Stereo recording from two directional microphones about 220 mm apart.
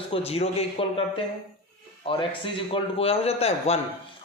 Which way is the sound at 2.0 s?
25° left (ahead or behind).